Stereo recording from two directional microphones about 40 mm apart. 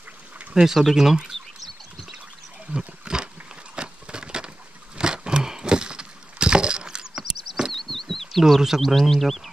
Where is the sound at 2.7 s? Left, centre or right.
Centre.